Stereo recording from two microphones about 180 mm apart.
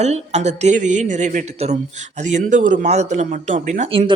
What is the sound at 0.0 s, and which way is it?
A man's voice, 40° right (ahead or behind).